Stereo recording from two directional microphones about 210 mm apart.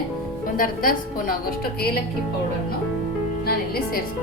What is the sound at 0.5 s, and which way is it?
Speech, 45° left (ahead or behind).